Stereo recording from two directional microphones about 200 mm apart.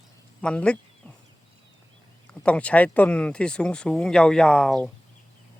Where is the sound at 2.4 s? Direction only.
5° left (ahead or behind).